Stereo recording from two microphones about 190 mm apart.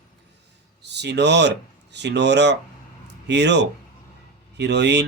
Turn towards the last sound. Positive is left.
turn(degrees=-65)  # may be behind; listen again after turning